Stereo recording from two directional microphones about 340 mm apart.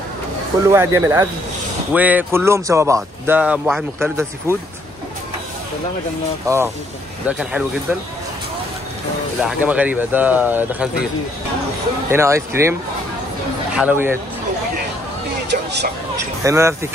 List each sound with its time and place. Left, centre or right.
0.7 s speech: centre
6.4 s speech: centre
9.4 s speech: centre
12.1 s speech: centre
13.7 s speech: centre
15.5 s vehicle: right
16.4 s speech: centre